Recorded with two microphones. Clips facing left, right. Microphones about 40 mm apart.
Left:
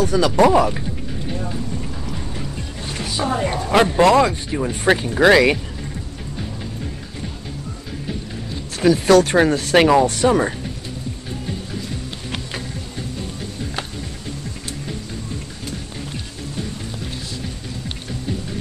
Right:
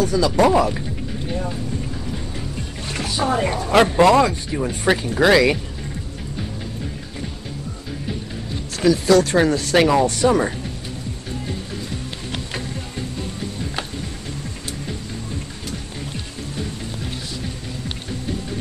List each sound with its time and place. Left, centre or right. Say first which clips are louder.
0.0 s speech: left 1 dB; left
0.4 s speech: left 2 dB; centre
3.2 s a woman's voice: right 1 dB; centre
3.5 s speech: even; centre
8.8 s speech: left 2 dB; centre